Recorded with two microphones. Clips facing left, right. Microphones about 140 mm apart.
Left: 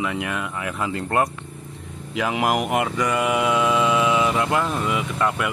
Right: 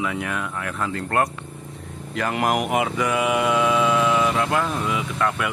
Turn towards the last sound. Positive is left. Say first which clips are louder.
# left 1 dB
turn(degrees=5)  # may be behind; listen again after turning